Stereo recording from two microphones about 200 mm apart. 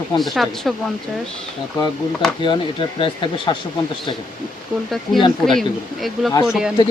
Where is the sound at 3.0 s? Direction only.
25° left (ahead or behind).